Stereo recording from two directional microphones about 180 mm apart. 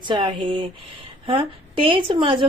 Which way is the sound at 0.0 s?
25° right (ahead or behind).